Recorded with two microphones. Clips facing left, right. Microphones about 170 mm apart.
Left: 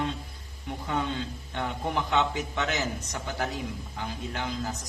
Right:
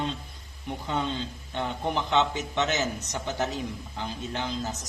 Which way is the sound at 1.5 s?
20° right (ahead or behind).